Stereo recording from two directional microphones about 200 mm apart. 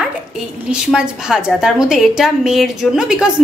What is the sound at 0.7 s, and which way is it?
A woman's voice, 5° right (ahead or behind).